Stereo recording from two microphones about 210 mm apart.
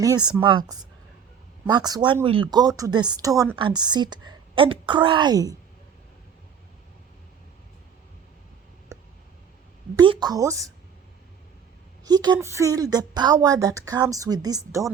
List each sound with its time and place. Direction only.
0.3 s speech: 20° right (ahead or behind)
8.9 s clicking: 15° right (ahead or behind)
10.0 s speech: 20° right (ahead or behind)
12.0 s a woman's voice: 20° right (ahead or behind)